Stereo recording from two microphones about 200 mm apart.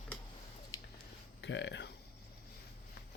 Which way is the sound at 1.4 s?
65° left (ahead or behind).